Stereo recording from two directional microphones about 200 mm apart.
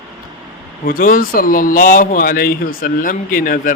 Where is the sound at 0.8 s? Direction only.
45° left (ahead or behind).